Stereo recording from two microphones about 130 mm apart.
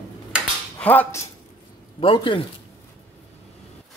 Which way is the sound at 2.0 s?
40° left (ahead or behind).